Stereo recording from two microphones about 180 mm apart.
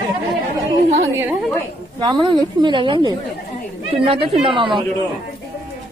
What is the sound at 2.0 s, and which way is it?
A woman's voice, 25° right (ahead or behind).